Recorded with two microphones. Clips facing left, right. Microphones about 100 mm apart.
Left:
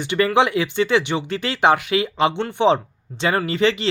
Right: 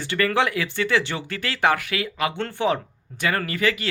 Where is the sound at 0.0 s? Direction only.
20° left (ahead or behind).